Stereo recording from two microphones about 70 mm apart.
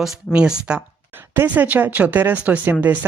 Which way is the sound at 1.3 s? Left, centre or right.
Right.